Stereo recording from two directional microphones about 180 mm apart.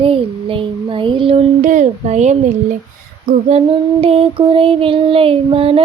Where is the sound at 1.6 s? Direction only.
45° right (ahead or behind).